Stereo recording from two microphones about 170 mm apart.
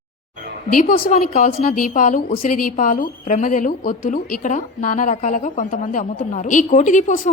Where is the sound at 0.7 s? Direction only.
45° left (ahead or behind).